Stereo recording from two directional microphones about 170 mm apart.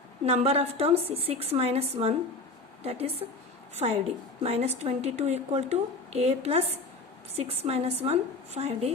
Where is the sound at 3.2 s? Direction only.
30° right (ahead or behind).